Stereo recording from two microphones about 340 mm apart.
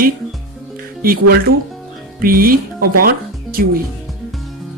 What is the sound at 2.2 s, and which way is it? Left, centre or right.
Speech, right.